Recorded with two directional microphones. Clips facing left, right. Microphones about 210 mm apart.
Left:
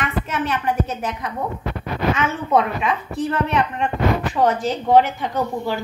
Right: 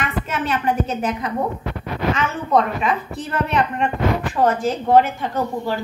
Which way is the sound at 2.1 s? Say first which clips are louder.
Right 1 dB; centre (ahead or behind).